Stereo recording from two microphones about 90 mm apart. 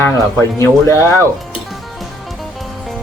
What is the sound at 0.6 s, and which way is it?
Speech, 30° left (ahead or behind).